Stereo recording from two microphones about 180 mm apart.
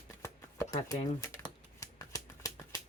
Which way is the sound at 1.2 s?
15° left (ahead or behind).